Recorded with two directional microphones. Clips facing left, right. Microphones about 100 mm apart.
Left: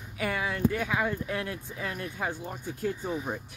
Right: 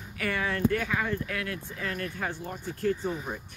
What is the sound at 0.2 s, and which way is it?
Speech, 15° left (ahead or behind).